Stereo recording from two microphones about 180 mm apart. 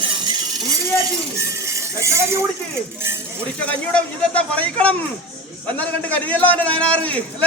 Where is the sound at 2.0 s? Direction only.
15° right (ahead or behind).